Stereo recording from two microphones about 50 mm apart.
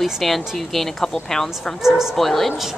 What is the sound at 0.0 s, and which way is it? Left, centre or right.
A woman's voice, centre.